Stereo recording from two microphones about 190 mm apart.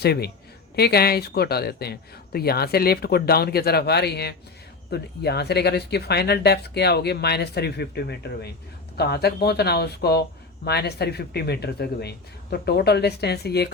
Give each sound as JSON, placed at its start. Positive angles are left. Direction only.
{"t": 0.0, "sound": "a man's voice", "side_deg": 55}